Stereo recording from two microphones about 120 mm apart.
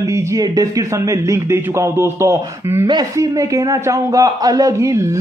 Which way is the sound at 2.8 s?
30° right (ahead or behind).